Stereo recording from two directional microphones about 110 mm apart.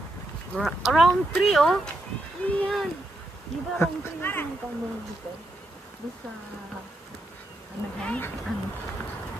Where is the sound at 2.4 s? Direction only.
15° left (ahead or behind).